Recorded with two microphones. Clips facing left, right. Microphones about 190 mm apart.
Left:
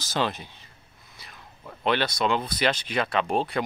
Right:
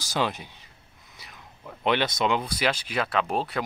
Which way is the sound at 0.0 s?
15° right (ahead or behind).